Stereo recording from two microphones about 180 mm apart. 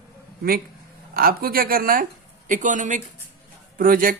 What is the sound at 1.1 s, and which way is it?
Speech, 55° right (ahead or behind).